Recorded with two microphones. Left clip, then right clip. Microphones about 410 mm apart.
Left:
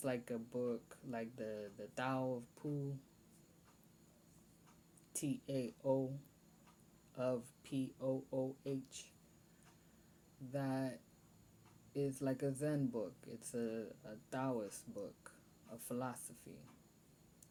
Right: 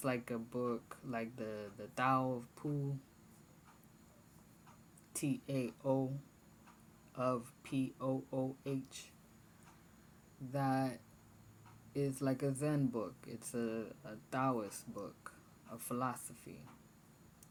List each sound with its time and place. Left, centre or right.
0.0 s speech: left
5.1 s speech: left
7.2 s speech: left
10.5 s speech: left